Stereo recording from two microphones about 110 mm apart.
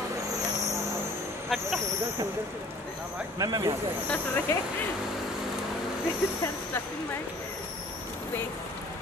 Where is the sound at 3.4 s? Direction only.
35° right (ahead or behind).